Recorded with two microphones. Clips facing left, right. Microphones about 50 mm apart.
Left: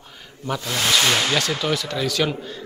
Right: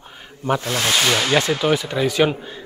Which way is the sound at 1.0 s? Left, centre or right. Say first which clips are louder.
Right 3 dB; centre.